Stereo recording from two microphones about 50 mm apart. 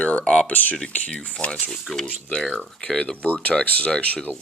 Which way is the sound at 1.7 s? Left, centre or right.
Centre.